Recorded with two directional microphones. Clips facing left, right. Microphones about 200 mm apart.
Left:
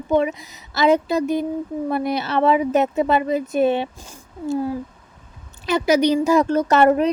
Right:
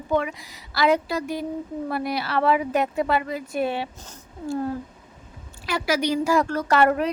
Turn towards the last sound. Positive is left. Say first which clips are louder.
# left 5 dB
turn(degrees=20)  # may be behind; listen again after turning